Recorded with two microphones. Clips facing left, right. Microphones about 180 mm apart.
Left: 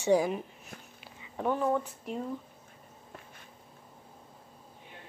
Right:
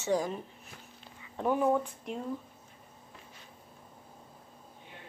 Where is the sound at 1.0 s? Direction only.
10° left (ahead or behind).